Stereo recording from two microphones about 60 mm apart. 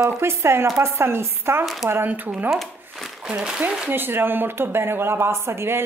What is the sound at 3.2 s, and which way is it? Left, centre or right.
Speech, centre.